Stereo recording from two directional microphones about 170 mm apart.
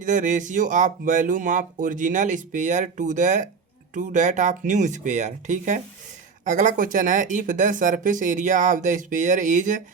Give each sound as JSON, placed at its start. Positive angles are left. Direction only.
{"t": 0.0, "sound": "speech", "side_deg": -50}